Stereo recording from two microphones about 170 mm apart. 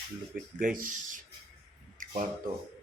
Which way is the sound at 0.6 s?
55° right (ahead or behind).